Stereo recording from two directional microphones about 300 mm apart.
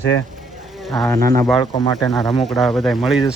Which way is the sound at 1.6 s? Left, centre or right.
Centre.